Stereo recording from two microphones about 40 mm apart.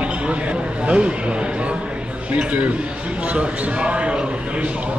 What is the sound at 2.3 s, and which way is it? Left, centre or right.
A man's voice, right.